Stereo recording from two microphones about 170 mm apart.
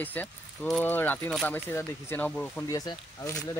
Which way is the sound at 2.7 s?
20° left (ahead or behind).